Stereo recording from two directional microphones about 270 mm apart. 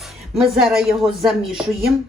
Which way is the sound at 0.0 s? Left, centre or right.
Centre.